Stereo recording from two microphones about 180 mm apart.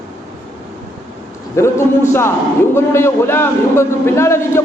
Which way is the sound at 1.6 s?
15° left (ahead or behind).